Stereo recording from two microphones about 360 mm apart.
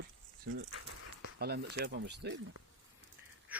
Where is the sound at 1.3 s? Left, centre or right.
Right.